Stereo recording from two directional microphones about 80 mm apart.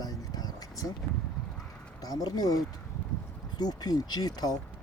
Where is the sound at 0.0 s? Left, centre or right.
Left.